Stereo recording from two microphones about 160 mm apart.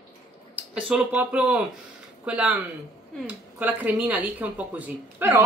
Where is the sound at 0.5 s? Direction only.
10° right (ahead or behind).